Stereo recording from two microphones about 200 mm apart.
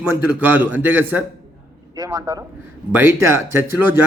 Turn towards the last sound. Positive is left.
turn(degrees=-10)  # may be behind; listen again after turning